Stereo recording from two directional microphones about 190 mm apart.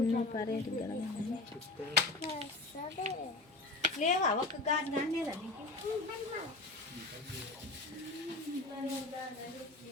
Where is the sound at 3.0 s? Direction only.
40° left (ahead or behind).